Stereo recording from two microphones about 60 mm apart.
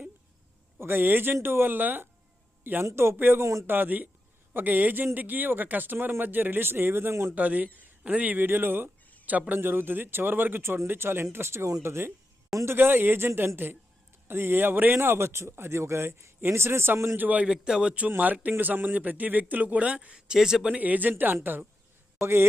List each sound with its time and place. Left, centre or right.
0.8 s speech: right
2.8 s a man's voice: right
3.4 s a man's voice: right
3.7 s speech: right
7.3 s a man's voice: right
17.2 s speech: right
17.5 s a man's voice: centre
20.1 s speech: centre; by 21.3 s right
22.2 s a man's voice: right